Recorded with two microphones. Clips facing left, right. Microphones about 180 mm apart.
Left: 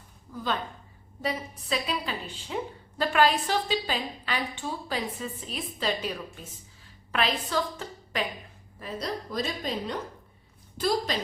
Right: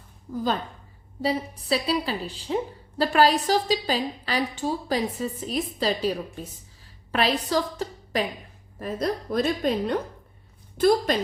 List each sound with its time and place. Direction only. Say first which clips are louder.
0.3 s a woman's voice: right 9 dB; 45° right (ahead or behind)
1.2 s a woman's voice: right 6 dB; 30° right (ahead or behind)
8.8 s a woman's voice: right 6 dB; 50° right (ahead or behind)